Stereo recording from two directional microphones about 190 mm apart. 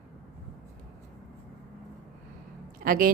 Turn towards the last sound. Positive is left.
turn(degrees=-50)  # may be behind; listen again after turning